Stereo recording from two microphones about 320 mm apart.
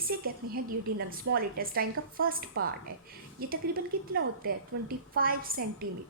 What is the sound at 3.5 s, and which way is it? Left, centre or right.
A woman's voice, right.